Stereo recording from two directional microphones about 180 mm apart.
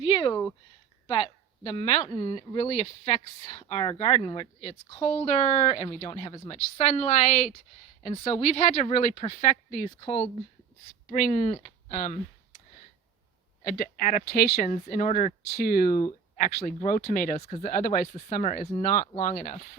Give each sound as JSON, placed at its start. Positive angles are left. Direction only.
{"t": 0.0, "sound": "speech", "side_deg": 25}
{"t": 10.0, "sound": "speech", "side_deg": 20}
{"t": 11.1, "sound": "speech", "side_deg": 40}
{"t": 13.7, "sound": "speech", "side_deg": 50}
{"t": 14.7, "sound": "speech", "side_deg": 45}